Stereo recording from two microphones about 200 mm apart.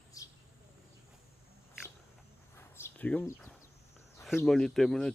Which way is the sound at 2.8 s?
10° left (ahead or behind).